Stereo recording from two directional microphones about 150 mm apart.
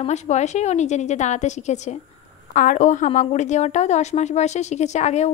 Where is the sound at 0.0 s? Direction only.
50° left (ahead or behind).